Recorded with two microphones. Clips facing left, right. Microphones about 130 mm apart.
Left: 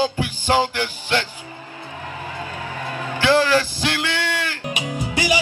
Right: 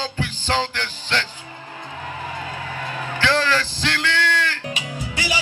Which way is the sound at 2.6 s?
15° left (ahead or behind).